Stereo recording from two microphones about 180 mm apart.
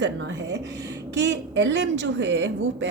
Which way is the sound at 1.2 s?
85° right.